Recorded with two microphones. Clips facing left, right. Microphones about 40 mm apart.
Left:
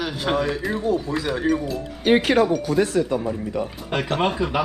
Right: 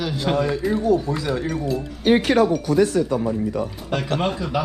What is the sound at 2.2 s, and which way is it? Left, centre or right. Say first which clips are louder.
Speech: right 1 dB; left.